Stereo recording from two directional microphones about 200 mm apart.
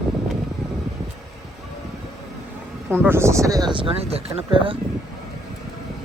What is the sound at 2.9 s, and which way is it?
Speech, 10° right (ahead or behind).